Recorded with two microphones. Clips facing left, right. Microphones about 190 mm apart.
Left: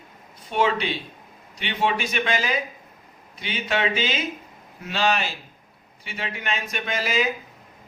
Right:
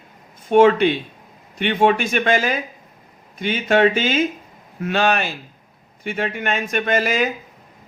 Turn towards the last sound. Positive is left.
turn(degrees=-50)  # may be behind; listen again after turning